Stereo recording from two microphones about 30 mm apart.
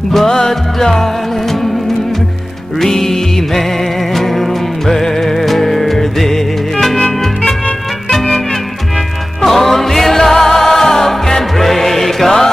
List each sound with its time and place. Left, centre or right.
0.5 s music: centre
2.8 s music: centre
7.1 s music: left
9.4 s music: centre